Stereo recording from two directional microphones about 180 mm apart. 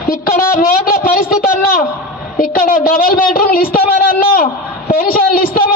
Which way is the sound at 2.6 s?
50° left (ahead or behind).